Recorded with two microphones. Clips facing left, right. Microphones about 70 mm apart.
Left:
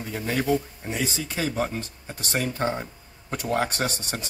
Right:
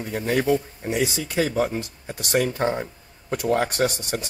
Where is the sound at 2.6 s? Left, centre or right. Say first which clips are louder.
Right 3 dB; right.